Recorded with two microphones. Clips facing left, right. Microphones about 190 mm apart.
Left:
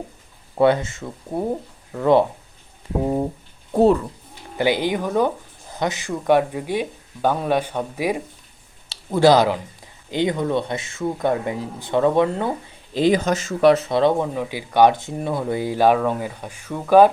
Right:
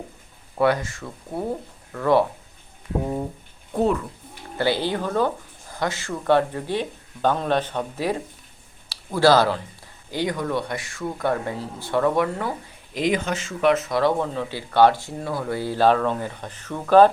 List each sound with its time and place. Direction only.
0.5 s speech: 25° left (ahead or behind)
3.7 s speech: 35° left (ahead or behind)
4.5 s speech: 15° left (ahead or behind)